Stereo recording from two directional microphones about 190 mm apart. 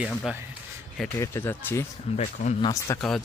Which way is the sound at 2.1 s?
30° left (ahead or behind).